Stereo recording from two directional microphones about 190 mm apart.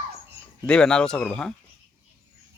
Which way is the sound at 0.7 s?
5° left (ahead or behind).